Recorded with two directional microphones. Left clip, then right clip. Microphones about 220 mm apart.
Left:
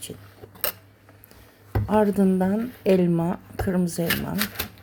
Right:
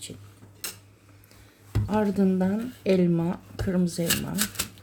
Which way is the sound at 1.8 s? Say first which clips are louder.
Left 5 dB; 5° left (ahead or behind).